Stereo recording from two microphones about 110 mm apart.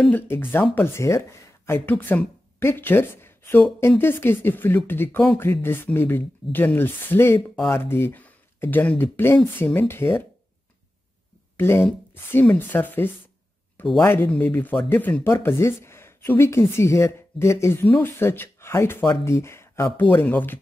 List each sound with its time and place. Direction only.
0.3 s speech: 20° left (ahead or behind)
11.5 s speech: 20° left (ahead or behind)